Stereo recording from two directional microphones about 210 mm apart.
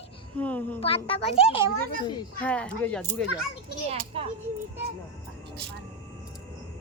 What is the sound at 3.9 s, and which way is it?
Speech, 30° right (ahead or behind).